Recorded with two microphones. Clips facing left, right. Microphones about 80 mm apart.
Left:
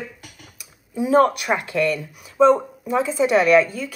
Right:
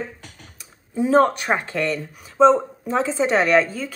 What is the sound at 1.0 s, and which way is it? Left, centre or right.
Speech, right.